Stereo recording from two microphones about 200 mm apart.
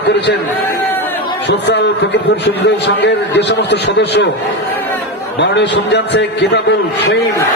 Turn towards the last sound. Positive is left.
turn(degrees=60)  # may be behind; listen again after turning